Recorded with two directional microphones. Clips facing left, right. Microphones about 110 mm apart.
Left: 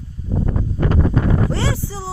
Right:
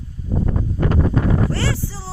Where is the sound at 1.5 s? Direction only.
20° left (ahead or behind).